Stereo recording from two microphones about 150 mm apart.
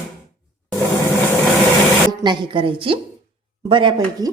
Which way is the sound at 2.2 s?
30° right (ahead or behind).